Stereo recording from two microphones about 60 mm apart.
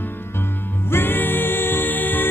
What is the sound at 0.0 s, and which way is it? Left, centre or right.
Music, left.